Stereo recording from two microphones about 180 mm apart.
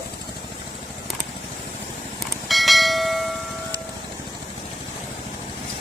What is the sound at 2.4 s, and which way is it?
Bell, centre (ahead or behind).